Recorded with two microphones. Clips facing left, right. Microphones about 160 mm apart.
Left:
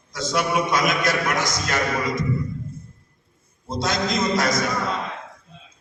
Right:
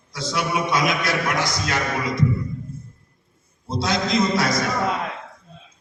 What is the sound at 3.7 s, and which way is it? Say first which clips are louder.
Speech: right 2 dB; 45° left (ahead or behind).